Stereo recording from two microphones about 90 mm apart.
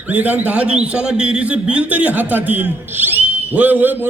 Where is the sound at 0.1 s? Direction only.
20° right (ahead or behind).